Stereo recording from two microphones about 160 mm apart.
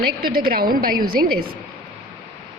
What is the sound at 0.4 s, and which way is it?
Speech, 60° right (ahead or behind).